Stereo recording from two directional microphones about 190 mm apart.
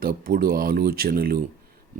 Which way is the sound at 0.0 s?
50° right (ahead or behind).